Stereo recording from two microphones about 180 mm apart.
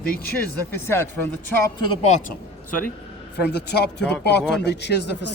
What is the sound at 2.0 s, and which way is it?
Speech, 40° left (ahead or behind).